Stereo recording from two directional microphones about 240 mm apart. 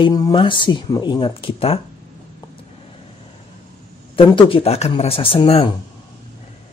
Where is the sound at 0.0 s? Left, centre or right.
Centre.